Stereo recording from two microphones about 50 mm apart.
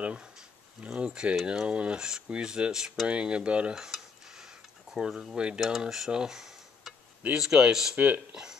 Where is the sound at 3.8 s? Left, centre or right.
Centre.